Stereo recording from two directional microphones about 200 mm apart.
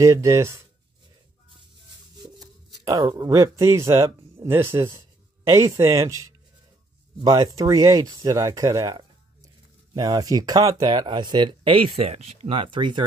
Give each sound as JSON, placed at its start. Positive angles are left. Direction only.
{"t": 0.0, "sound": "speech", "side_deg": -15}
{"t": 2.2, "sound": "speech", "side_deg": -20}